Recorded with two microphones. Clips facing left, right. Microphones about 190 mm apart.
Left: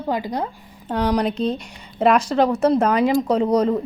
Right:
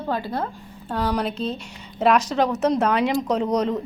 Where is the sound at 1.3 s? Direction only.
35° left (ahead or behind).